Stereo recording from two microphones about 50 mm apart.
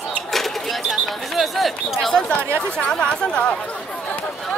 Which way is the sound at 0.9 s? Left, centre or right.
Centre.